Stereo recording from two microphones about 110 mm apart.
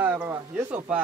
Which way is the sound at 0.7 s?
15° right (ahead or behind).